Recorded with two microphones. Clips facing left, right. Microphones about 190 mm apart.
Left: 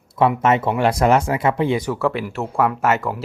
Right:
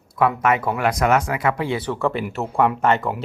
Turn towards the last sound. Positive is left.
turn(degrees=0)  # may be behind; listen again after turning